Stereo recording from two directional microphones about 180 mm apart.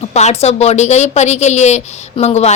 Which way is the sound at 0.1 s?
40° left (ahead or behind).